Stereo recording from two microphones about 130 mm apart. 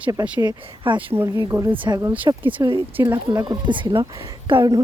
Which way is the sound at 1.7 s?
40° right (ahead or behind).